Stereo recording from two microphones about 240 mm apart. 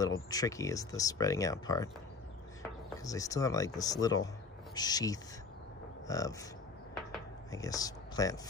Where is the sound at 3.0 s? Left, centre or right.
Centre.